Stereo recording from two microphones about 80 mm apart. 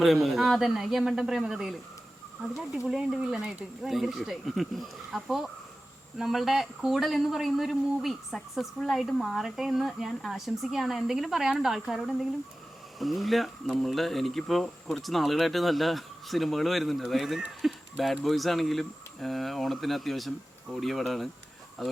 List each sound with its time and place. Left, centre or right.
0.0 s speech: centre
2.8 s speech: centre